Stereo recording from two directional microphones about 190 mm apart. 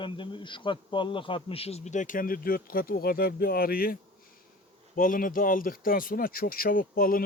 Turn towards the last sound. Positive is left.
turn(degrees=50)  # may be behind; listen again after turning